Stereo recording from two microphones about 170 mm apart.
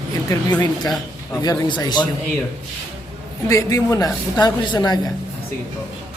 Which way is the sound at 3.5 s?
20° left (ahead or behind).